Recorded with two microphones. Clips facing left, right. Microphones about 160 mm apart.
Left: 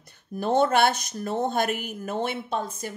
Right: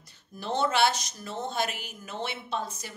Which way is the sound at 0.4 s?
50° left (ahead or behind).